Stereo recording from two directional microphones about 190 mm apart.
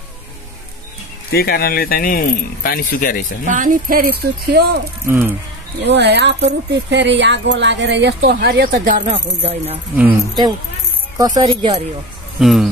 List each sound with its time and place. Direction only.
1.3 s speech: 55° left (ahead or behind)
3.4 s speech: 45° right (ahead or behind)
5.0 s speech: 10° right (ahead or behind)
5.8 s speech: 60° right (ahead or behind)
9.1 s speech: 30° right (ahead or behind)
11.1 s speech: 20° right (ahead or behind)
12.4 s speech: centre (ahead or behind)